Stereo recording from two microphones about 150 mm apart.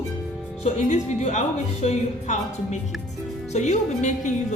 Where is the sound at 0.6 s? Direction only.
50° left (ahead or behind).